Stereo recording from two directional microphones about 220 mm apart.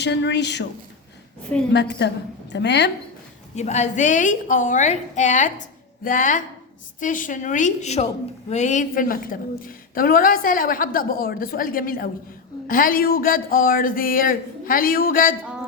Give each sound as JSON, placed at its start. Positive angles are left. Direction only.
{"t": 0.0, "sound": "a woman's voice", "side_deg": 50}
{"t": 2.0, "sound": "a woman's voice", "side_deg": 50}
{"t": 3.5, "sound": "a woman's voice", "side_deg": 30}